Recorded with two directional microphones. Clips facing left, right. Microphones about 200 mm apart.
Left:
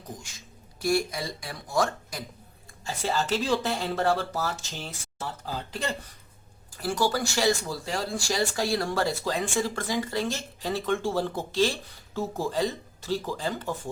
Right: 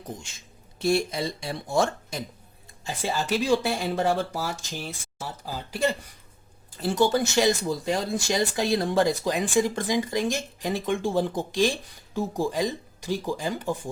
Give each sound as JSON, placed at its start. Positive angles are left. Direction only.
{"t": 0.2, "sound": "speech", "side_deg": -25}
{"t": 2.8, "sound": "speech", "side_deg": -15}
{"t": 6.7, "sound": "speech", "side_deg": -20}